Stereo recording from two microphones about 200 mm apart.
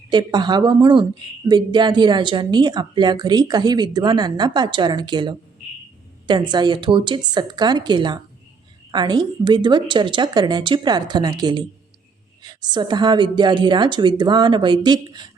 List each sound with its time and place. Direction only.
0.1 s speech: 20° right (ahead or behind)